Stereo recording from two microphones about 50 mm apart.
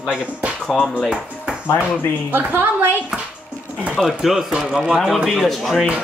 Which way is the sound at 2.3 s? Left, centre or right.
Right.